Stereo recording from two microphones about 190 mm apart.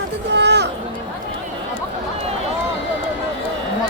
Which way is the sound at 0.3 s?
65° right (ahead or behind).